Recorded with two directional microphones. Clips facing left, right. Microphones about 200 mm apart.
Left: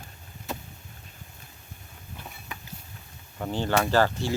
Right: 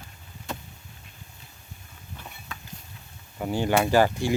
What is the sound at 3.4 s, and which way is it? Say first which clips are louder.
Speech: right 2 dB; 10° right (ahead or behind).